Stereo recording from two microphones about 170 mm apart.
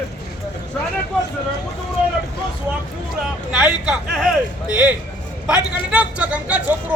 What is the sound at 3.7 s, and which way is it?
Speech, centre (ahead or behind).